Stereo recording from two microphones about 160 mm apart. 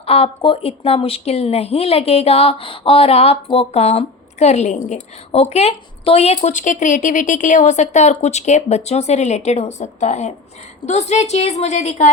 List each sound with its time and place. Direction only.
0.0 s speech: 40° left (ahead or behind)